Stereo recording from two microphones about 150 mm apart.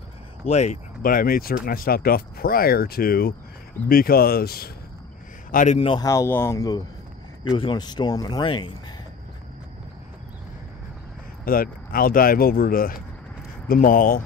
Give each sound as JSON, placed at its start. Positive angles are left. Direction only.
{"t": 0.5, "sound": "speech", "side_deg": 50}
{"t": 1.0, "sound": "speech", "side_deg": 75}
{"t": 5.5, "sound": "a man's voice", "side_deg": 60}
{"t": 5.8, "sound": "speech", "side_deg": 35}
{"t": 6.0, "sound": "speech", "side_deg": 20}
{"t": 11.4, "sound": "speech", "side_deg": 75}